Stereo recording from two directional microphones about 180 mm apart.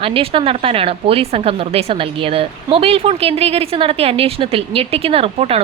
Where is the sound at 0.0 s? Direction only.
30° right (ahead or behind).